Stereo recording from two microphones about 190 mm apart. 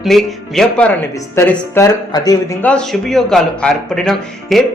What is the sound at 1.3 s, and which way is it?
Speech, 15° left (ahead or behind).